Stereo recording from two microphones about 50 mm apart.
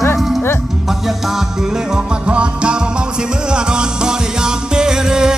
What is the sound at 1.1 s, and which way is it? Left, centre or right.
Music, centre.